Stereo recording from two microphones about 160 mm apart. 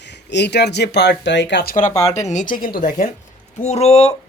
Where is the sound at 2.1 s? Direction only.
45° left (ahead or behind).